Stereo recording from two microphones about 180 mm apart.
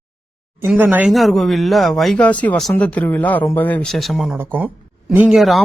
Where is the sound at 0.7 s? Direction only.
10° right (ahead or behind).